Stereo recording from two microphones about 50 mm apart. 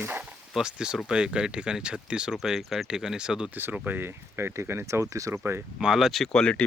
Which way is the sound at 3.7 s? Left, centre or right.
Right.